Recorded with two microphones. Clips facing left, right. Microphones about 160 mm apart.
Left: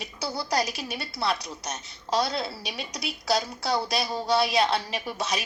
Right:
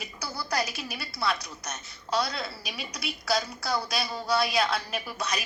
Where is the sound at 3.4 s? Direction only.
30° left (ahead or behind).